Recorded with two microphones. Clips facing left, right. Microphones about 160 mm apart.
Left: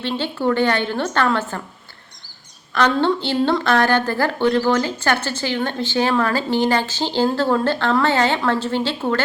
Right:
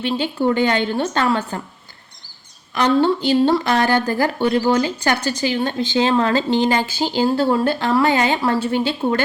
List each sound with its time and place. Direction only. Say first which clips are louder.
0.0 s a woman's voice: right 2 dB; 15° right (ahead or behind)
2.7 s a woman's voice: right 2 dB; 15° right (ahead or behind)